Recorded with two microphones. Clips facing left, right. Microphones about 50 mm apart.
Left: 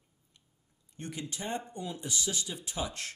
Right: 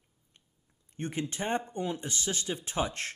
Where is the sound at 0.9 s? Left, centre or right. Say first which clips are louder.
Right 6 dB; right.